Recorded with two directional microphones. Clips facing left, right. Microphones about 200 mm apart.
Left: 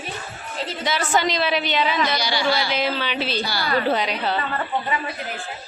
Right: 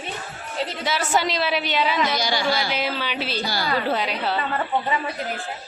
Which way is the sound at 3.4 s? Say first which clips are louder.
Even; 45° right (ahead or behind).